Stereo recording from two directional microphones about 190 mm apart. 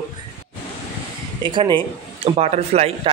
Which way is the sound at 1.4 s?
25° right (ahead or behind).